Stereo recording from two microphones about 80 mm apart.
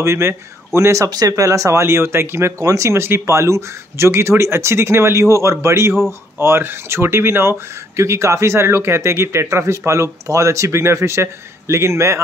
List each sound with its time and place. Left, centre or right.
0.0 s speech: right